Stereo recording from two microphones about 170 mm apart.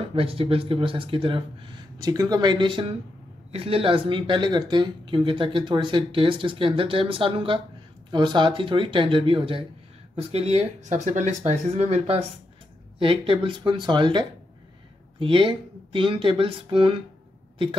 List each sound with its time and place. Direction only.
0.1 s speech: 35° right (ahead or behind)